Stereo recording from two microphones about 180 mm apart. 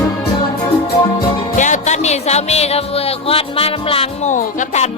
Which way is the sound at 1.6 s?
40° left (ahead or behind).